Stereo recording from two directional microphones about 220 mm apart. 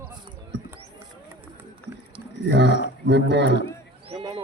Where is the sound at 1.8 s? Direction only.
5° left (ahead or behind).